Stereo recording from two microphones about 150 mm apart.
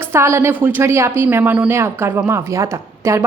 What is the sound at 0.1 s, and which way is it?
A woman's voice, 15° right (ahead or behind).